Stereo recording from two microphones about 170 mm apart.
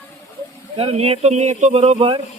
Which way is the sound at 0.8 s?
35° right (ahead or behind).